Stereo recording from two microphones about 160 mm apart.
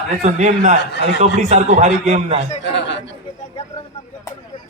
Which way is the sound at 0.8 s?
90° left.